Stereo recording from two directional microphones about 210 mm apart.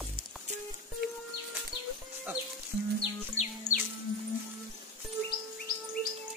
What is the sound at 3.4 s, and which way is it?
Music, 70° left (ahead or behind).